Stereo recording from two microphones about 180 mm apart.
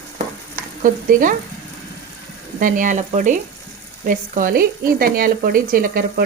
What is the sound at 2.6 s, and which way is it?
Speech, 45° right (ahead or behind).